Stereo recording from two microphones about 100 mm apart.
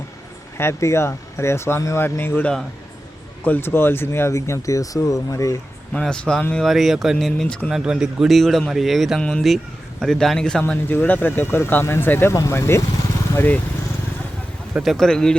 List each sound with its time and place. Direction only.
0.5 s speech: 25° left (ahead or behind)
5.9 s speech: 10° left (ahead or behind)
6.7 s speech: centre (ahead or behind); by 13.6 s 20° left (ahead or behind)
14.8 s speech: 5° left (ahead or behind)